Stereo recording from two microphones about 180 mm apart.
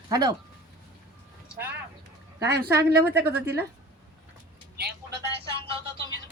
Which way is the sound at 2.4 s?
65° right (ahead or behind).